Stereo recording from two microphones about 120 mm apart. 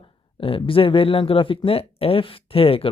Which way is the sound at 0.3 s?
50° left (ahead or behind).